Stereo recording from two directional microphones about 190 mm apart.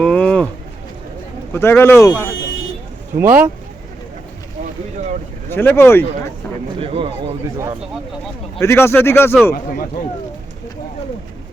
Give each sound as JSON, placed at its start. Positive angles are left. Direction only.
{"t": 0.0, "sound": "a sound", "side_deg": 5}
{"t": 1.5, "sound": "speech", "side_deg": 15}
{"t": 3.2, "sound": "speech", "side_deg": -10}
{"t": 5.5, "sound": "speech", "side_deg": 10}
{"t": 6.7, "sound": "speech", "side_deg": -30}
{"t": 8.6, "sound": "speech", "side_deg": 15}